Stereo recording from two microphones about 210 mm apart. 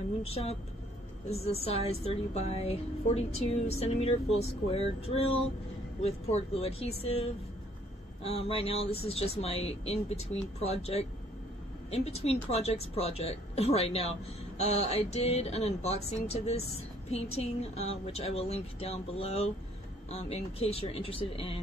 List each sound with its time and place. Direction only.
0.2 s speech: 30° left (ahead or behind)